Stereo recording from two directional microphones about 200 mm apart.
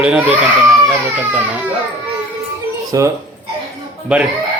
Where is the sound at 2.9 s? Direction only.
15° right (ahead or behind).